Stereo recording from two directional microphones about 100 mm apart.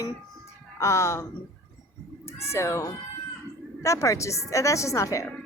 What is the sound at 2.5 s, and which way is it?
A woman's voice, 30° left (ahead or behind).